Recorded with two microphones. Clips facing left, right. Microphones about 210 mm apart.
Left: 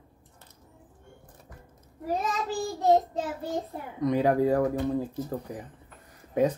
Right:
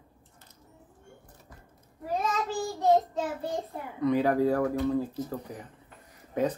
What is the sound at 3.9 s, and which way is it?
Speech, 15° left (ahead or behind).